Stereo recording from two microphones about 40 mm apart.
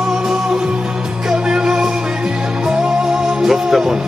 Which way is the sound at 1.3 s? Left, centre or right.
Centre.